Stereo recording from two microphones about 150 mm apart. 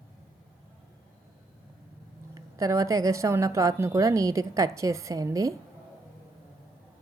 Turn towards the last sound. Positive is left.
turn(degrees=-20)  # may be behind; listen again after turning